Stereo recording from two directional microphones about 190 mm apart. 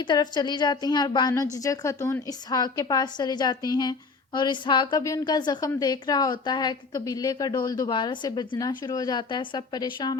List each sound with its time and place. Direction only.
0.0 s a woman's voice: 20° left (ahead or behind)